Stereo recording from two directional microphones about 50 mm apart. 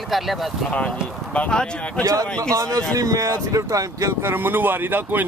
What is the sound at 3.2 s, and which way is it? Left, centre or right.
Speech, right.